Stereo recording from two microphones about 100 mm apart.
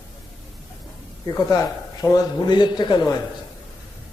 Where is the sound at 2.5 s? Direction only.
50° left (ahead or behind).